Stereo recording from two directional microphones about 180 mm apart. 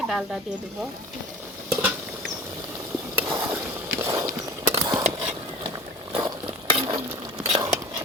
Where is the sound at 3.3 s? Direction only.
20° right (ahead or behind).